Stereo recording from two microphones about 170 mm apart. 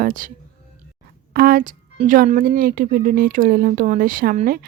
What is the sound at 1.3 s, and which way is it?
Speech, 60° right (ahead or behind).